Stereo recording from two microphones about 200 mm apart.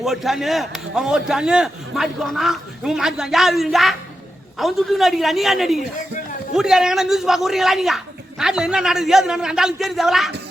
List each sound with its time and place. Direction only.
0.0 s a man's voice: centre (ahead or behind)